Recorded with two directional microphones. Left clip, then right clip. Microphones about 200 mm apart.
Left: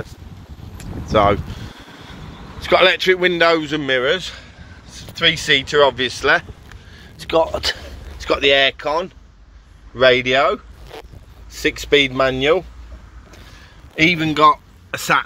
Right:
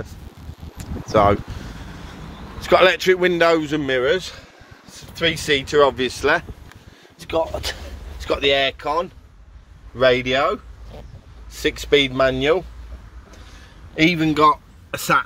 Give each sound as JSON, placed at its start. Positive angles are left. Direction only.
{"t": 0.7, "sound": "a sound", "side_deg": -10}
{"t": 2.6, "sound": "a man's voice", "side_deg": -20}
{"t": 4.8, "sound": "speech", "side_deg": -20}
{"t": 7.2, "sound": "a sound", "side_deg": 25}
{"t": 8.2, "sound": "speech", "side_deg": 5}
{"t": 13.9, "sound": "speech", "side_deg": -10}